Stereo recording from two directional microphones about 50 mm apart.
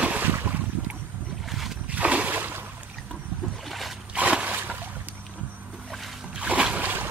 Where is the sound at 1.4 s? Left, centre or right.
Centre.